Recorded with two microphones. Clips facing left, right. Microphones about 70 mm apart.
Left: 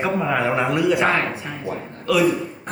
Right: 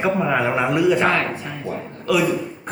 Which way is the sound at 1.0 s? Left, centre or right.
Centre.